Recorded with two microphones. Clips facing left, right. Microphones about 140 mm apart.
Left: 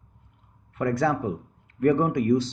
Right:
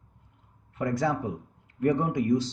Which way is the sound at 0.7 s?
65° left (ahead or behind).